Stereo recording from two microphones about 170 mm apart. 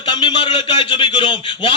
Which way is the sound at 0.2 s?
30° left (ahead or behind).